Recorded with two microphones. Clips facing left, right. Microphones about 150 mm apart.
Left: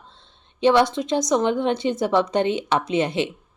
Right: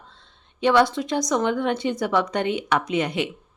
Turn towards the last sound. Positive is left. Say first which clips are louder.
# left 2 dB
turn(degrees=25)  # may be behind; listen again after turning